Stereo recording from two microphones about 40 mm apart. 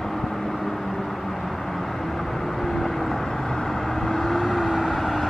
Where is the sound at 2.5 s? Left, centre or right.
Centre.